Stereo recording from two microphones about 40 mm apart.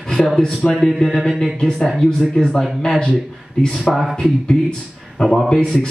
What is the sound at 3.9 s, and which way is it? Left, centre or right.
Speech, left.